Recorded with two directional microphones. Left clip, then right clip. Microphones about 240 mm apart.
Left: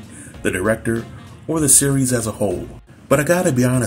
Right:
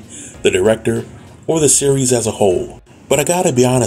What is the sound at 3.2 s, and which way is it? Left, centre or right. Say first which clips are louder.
Speech: right 5 dB; centre.